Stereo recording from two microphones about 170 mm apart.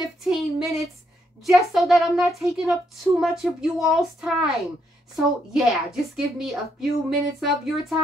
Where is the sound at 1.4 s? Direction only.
Centre (ahead or behind).